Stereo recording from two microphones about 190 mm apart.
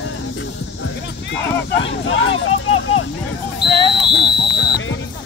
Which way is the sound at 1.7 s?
90° left.